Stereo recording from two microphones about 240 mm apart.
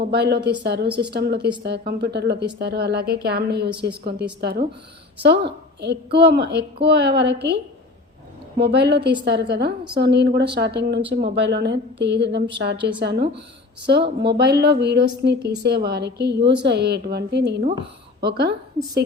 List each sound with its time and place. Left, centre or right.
0.0 s a woman's voice: right
5.8 s a woman's voice: right